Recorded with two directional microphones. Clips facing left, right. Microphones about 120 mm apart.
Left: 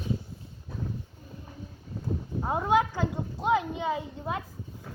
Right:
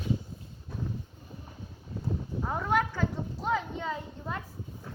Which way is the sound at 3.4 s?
15° left (ahead or behind).